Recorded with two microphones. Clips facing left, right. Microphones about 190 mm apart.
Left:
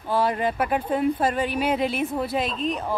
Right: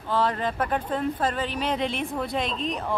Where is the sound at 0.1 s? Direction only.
10° left (ahead or behind).